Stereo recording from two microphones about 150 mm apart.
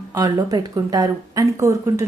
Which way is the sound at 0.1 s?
25° right (ahead or behind).